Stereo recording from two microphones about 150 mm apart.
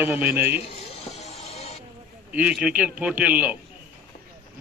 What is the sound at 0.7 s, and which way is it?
Music, 45° left (ahead or behind).